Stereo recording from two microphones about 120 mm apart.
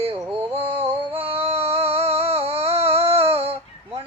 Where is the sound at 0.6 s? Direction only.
55° right (ahead or behind).